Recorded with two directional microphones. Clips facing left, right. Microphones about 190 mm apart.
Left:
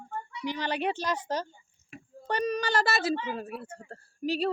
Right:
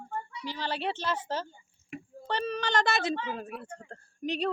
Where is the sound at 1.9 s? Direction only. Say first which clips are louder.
Right 6 dB; 15° right (ahead or behind).